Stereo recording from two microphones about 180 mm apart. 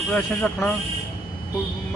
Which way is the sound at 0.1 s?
5° left (ahead or behind).